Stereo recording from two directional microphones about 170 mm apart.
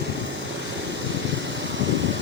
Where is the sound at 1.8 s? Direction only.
90° right.